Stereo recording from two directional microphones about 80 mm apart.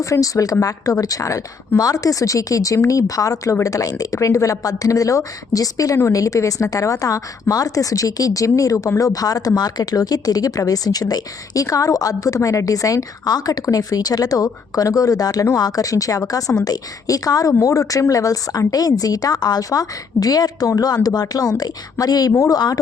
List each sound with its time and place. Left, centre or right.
0.0 s speech: left